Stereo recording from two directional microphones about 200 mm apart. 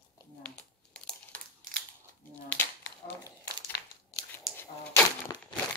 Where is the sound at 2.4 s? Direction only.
10° left (ahead or behind).